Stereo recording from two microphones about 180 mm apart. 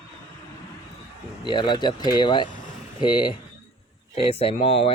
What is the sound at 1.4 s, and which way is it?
Speech, 25° left (ahead or behind).